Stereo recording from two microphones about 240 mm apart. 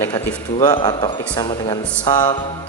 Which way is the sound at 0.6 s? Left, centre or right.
Centre.